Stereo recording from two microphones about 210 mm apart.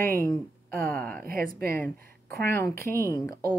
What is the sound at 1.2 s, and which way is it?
Speech, 45° right (ahead or behind).